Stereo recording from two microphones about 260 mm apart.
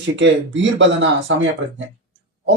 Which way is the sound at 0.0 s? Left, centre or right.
Right.